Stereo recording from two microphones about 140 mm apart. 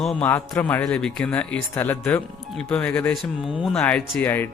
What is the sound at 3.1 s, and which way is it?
Speech, 5° right (ahead or behind).